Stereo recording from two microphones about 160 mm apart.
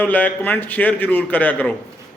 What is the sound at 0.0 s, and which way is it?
A man's voice, 10° left (ahead or behind).